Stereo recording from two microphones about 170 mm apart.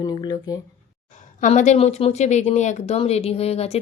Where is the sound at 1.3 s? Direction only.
45° left (ahead or behind).